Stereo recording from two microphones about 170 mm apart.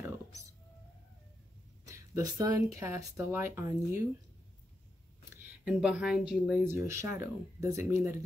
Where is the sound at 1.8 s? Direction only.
20° right (ahead or behind).